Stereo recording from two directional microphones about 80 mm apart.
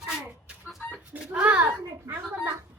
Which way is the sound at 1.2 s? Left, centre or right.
Centre.